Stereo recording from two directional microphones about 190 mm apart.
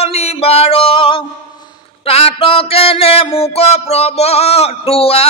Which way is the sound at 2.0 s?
30° left (ahead or behind).